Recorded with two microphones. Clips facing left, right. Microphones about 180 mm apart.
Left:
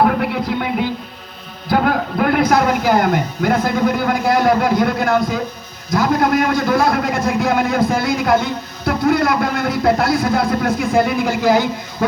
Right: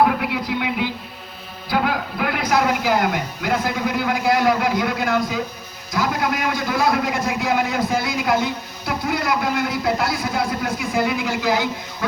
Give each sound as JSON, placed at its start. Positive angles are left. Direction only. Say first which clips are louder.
{"t": 0.0, "sound": "music", "louder": "left 3 dB", "side_deg": 50}
{"t": 1.7, "sound": "speech", "louder": "left 5 dB", "side_deg": 50}